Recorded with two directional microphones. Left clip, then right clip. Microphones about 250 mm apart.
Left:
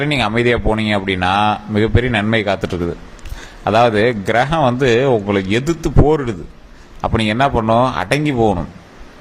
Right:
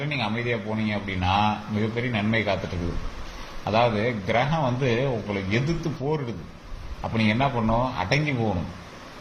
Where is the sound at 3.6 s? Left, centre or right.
Left.